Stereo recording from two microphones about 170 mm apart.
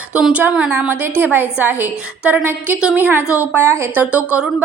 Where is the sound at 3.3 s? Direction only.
15° left (ahead or behind).